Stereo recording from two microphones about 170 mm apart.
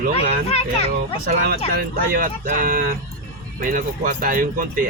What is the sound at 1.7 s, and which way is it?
Speech, 55° right (ahead or behind).